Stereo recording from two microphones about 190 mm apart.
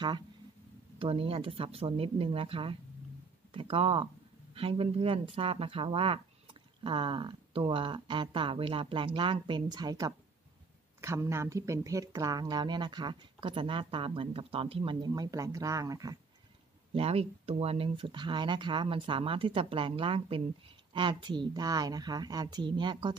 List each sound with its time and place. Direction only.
0.9 s speech: 30° right (ahead or behind)
16.9 s speech: 30° right (ahead or behind)